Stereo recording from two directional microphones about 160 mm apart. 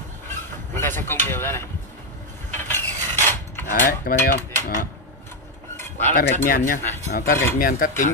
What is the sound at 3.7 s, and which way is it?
Speech, 60° left (ahead or behind).